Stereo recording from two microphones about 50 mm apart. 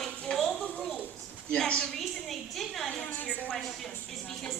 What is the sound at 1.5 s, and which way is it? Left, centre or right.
Speech, centre.